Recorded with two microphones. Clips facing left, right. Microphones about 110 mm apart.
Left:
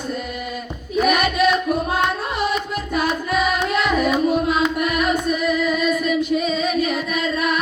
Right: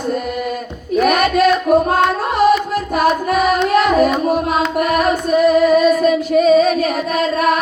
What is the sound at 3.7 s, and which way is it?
Music, 45° right (ahead or behind).